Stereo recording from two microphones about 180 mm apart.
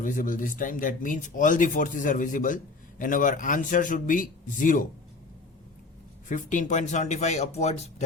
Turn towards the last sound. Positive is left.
turn(degrees=40)  # may be behind; listen again after turning